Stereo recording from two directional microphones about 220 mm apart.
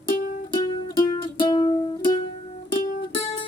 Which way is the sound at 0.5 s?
20° left (ahead or behind).